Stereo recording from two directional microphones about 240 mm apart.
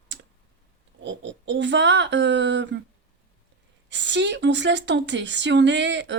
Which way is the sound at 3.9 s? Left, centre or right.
Right.